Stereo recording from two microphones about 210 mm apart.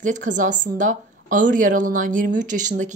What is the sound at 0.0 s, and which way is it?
Speech, 35° right (ahead or behind).